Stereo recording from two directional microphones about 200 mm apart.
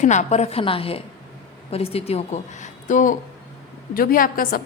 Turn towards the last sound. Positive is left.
turn(degrees=45)  # may be behind; listen again after turning